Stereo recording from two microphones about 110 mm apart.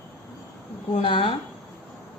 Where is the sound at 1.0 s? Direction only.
55° left (ahead or behind).